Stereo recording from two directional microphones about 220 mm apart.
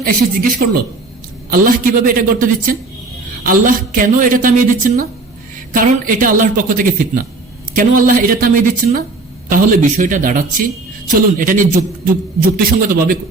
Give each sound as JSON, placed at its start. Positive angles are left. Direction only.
{"t": 0.0, "sound": "a woman's voice", "side_deg": -40}